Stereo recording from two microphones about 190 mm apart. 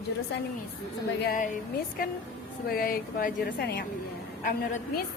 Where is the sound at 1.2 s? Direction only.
45° left (ahead or behind).